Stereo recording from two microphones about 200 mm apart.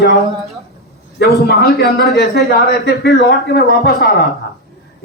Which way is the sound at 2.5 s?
55° left (ahead or behind).